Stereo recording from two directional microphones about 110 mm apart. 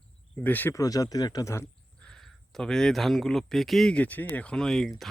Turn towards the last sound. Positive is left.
turn(degrees=0)  # may be behind; listen again after turning